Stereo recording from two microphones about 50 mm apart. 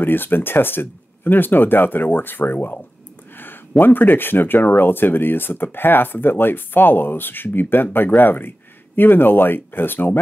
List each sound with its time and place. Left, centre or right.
0.0 s speech: left